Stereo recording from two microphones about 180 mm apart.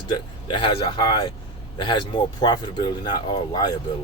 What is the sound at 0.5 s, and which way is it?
Speech, 30° left (ahead or behind).